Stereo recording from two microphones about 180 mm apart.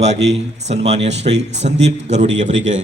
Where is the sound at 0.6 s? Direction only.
35° right (ahead or behind).